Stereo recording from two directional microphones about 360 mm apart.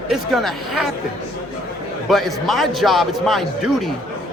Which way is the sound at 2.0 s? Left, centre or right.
Centre.